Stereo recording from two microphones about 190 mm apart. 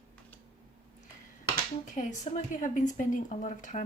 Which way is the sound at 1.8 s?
40° left (ahead or behind).